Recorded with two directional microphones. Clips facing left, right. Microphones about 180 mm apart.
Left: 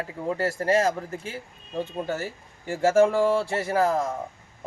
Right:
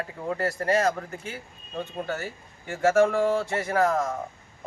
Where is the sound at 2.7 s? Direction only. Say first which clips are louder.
Left 1 dB; 30° left (ahead or behind).